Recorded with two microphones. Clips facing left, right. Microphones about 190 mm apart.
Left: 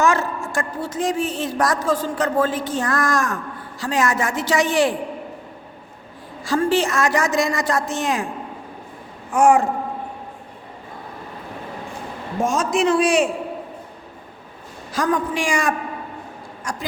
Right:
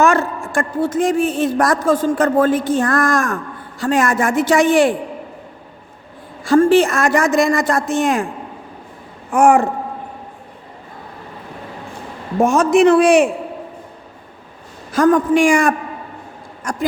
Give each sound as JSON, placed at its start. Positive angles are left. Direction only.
{"t": 0.0, "sound": "a woman's voice", "side_deg": -60}
{"t": 6.4, "sound": "a woman's voice", "side_deg": -55}
{"t": 9.3, "sound": "a man's voice", "side_deg": -60}
{"t": 12.4, "sound": "a man's voice", "side_deg": -60}
{"t": 14.9, "sound": "a woman's voice", "side_deg": -50}